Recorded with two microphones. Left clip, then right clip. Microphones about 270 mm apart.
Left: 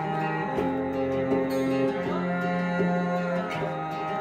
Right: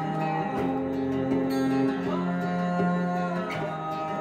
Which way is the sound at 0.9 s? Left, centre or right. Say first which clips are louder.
Left 2 dB; centre.